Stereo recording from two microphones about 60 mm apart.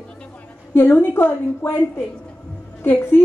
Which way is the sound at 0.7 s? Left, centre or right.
Left.